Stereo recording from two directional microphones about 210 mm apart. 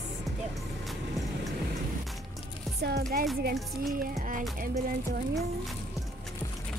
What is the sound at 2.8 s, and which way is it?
Speech, 50° right (ahead or behind).